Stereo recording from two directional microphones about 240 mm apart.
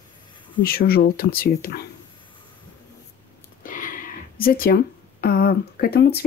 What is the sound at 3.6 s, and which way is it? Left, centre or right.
Speech, left.